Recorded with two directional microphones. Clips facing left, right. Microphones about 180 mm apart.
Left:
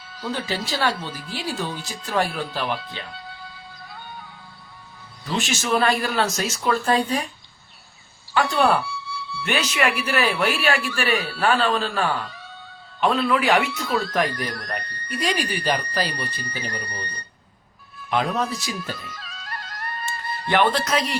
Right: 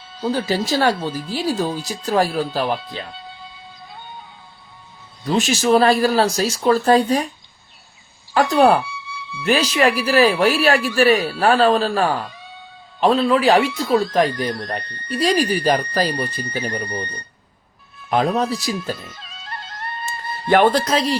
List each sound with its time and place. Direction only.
0.1 s music: 25° right (ahead or behind)
0.3 s speech: 40° right (ahead or behind)
3.2 s music: 20° right (ahead or behind)
5.2 s speech: 35° right (ahead or behind)
8.3 s speech: 40° right (ahead or behind)
8.8 s music: 15° right (ahead or behind)
9.5 s speech: 35° right (ahead or behind)
16.7 s speech: 25° right (ahead or behind)
18.1 s speech: 35° right (ahead or behind)
18.9 s music: 25° right (ahead or behind)
20.5 s speech: 45° right (ahead or behind)
20.8 s speech: 30° right (ahead or behind)